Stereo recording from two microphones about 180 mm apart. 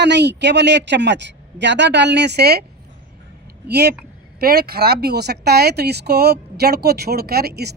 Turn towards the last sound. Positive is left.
turn(degrees=-65)  # may be behind; listen again after turning